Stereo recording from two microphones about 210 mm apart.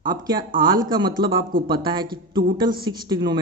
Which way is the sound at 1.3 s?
45° right (ahead or behind).